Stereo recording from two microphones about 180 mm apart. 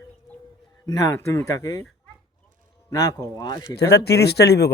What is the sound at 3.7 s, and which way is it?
Speech, 65° left (ahead or behind).